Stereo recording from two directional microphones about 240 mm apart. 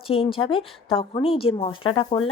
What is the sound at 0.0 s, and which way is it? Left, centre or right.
Speech, left.